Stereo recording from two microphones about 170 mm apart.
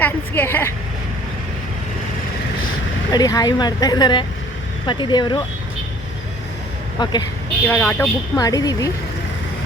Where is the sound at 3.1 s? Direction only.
20° left (ahead or behind).